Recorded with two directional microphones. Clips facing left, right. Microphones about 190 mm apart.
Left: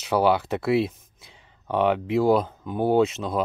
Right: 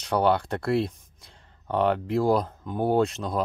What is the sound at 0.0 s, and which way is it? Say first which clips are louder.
Speech: left 2 dB; 5° left (ahead or behind).